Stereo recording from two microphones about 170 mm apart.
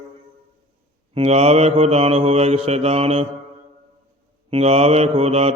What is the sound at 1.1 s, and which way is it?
Mantra, 35° right (ahead or behind).